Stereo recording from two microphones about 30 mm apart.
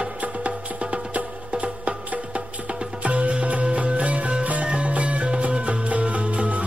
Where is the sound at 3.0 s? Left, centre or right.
Right.